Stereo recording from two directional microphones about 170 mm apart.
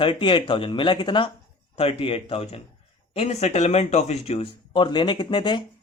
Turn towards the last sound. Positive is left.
turn(degrees=25)  # may be behind; listen again after turning